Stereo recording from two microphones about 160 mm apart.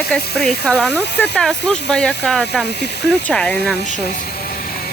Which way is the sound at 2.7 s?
90° left.